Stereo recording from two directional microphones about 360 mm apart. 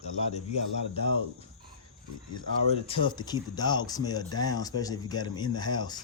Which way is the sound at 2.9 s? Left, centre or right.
Centre.